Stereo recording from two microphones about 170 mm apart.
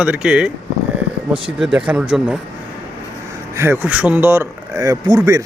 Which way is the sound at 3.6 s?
15° right (ahead or behind).